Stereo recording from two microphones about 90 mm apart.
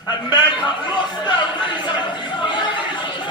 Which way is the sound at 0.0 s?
55° left (ahead or behind).